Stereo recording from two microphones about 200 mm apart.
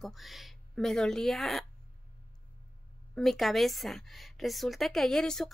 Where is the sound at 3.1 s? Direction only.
Centre (ahead or behind).